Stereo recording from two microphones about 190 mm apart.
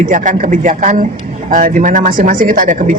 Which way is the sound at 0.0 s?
40° right (ahead or behind).